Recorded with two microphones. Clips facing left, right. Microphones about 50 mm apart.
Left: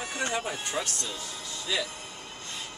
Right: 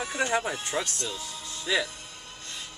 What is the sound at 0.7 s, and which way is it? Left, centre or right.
Speech, centre.